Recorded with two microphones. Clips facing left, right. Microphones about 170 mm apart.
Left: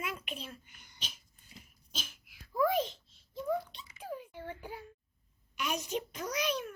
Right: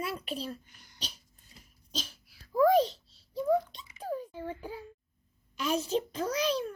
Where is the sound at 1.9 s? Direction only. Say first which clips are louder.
Right 6 dB; 35° right (ahead or behind).